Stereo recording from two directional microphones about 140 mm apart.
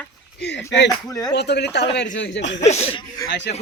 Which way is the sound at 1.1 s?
25° left (ahead or behind).